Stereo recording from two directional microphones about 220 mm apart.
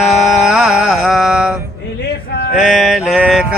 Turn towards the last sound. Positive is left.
turn(degrees=-5)  # may be behind; listen again after turning